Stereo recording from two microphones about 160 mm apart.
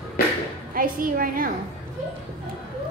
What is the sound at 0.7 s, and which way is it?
Speech, 60° right (ahead or behind).